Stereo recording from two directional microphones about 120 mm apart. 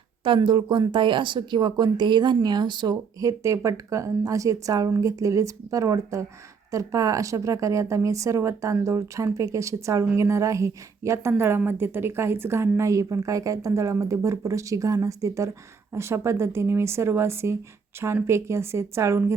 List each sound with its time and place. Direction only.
0.3 s a woman's voice: 40° right (ahead or behind); by 19.2 s 25° right (ahead or behind)